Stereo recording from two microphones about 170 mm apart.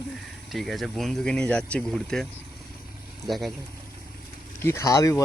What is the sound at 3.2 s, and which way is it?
Speech, centre (ahead or behind).